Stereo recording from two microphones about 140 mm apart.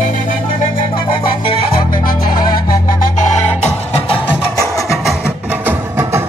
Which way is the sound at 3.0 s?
55° left (ahead or behind).